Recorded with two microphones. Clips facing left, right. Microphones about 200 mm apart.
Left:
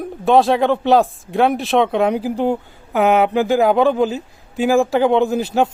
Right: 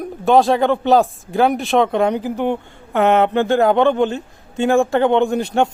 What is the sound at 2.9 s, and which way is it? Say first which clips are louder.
A man's voice: even; centre (ahead or behind).